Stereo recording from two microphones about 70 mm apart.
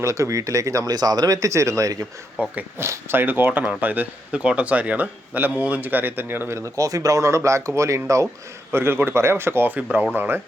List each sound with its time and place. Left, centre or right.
0.0 s speech: right
2.4 s speech: right
2.7 s speech: right
6.6 s speech: right
8.7 s speech: right